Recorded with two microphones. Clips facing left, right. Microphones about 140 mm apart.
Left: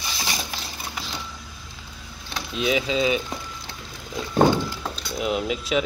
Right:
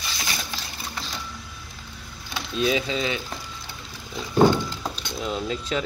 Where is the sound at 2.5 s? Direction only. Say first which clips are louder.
Left 1 dB; 10° left (ahead or behind).